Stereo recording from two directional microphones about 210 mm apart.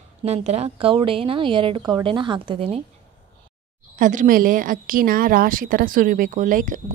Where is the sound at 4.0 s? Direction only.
40° right (ahead or behind).